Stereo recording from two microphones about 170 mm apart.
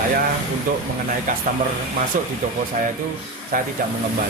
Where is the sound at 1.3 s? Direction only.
55° right (ahead or behind).